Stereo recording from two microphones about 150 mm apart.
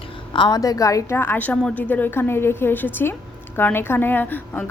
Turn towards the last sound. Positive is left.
turn(degrees=15)  # may be behind; listen again after turning